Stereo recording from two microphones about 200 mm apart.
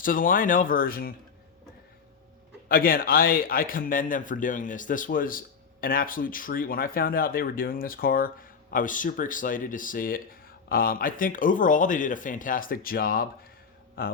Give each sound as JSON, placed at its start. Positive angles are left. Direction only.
{"t": 0.0, "sound": "speech", "side_deg": 45}
{"t": 2.6, "sound": "speech", "side_deg": 45}